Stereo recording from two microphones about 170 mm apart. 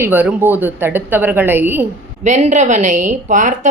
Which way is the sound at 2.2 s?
45° right (ahead or behind).